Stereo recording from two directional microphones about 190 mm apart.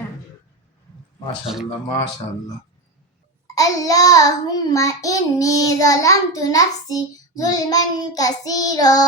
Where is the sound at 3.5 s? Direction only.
20° left (ahead or behind).